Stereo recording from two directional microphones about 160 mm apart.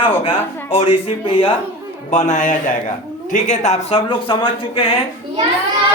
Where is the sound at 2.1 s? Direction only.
50° left (ahead or behind); by 4.8 s 30° left (ahead or behind).